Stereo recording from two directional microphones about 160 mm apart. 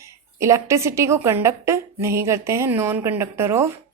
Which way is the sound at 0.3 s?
20° right (ahead or behind).